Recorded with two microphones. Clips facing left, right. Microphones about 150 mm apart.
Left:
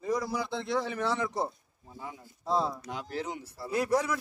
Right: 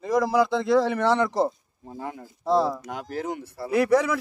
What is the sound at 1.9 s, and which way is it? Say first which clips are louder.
Speech: right 8 dB; 70° right (ahead or behind).